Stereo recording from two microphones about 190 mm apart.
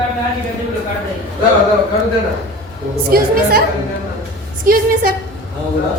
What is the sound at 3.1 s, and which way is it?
Speech, 55° right (ahead or behind).